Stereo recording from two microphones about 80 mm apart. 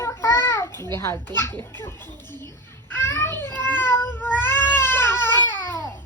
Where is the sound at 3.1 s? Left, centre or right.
Left.